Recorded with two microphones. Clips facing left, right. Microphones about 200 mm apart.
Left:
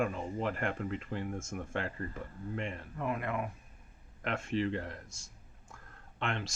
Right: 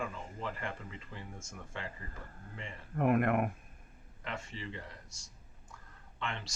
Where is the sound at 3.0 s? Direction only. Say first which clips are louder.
Right 7 dB; 55° right (ahead or behind).